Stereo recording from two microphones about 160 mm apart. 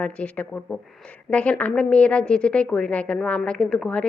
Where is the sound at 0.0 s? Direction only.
10° left (ahead or behind).